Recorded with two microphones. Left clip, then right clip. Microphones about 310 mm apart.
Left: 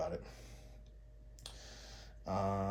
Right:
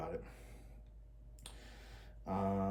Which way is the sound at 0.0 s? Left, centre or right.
Left.